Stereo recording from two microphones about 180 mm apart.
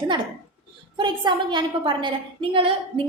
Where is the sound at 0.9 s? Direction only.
25° right (ahead or behind).